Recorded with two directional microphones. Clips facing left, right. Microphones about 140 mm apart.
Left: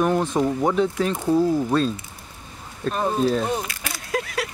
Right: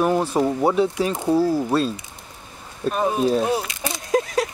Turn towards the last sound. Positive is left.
turn(degrees=-20)  # may be behind; listen again after turning